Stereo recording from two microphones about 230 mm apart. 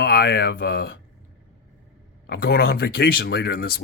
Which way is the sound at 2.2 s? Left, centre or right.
Left.